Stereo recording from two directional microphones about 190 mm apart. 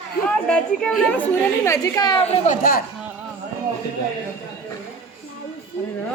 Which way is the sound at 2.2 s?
40° left (ahead or behind).